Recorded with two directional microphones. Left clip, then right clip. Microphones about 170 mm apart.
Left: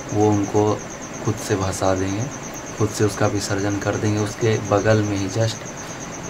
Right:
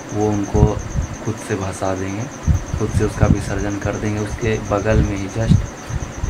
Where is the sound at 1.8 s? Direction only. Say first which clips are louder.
Left 2 dB; 10° left (ahead or behind).